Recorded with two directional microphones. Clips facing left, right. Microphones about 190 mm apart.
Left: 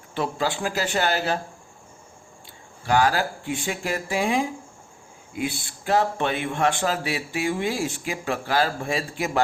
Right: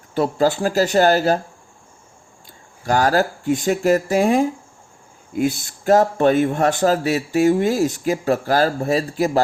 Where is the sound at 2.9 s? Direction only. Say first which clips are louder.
Right 4 dB; 40° right (ahead or behind).